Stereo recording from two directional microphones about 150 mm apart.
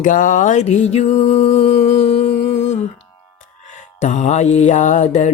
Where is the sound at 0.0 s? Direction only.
60° left (ahead or behind).